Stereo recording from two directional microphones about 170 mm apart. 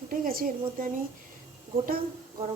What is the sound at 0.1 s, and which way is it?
Speech, 55° right (ahead or behind).